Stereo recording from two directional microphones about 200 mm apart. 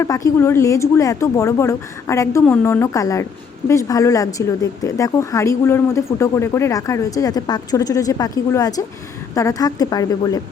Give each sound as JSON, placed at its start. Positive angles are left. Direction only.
{"t": 0.0, "sound": "speech", "side_deg": 15}